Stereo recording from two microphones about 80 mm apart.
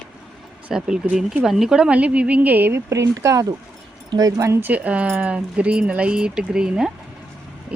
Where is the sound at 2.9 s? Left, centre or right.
Right.